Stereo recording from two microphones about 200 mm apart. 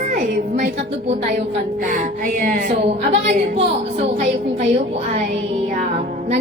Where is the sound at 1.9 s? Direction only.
40° right (ahead or behind).